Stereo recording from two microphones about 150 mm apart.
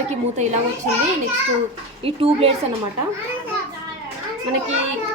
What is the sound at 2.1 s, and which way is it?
Speech, 40° right (ahead or behind).